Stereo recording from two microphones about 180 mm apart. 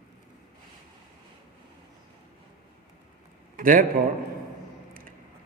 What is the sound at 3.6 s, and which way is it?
Speech, 50° right (ahead or behind).